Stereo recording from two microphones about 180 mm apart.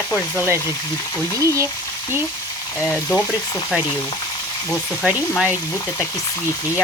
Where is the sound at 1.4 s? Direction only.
15° right (ahead or behind).